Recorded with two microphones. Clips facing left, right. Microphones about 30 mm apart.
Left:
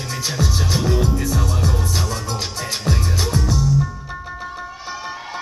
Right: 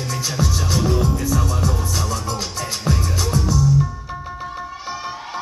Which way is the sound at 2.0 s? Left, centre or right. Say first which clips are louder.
Right 1 dB; centre.